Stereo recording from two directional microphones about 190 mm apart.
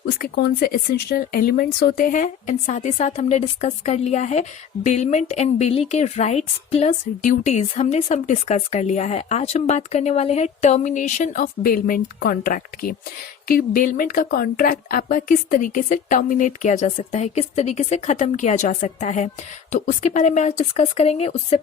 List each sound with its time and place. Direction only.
0.0 s a woman's voice: 55° left (ahead or behind); by 21.6 s 35° left (ahead or behind)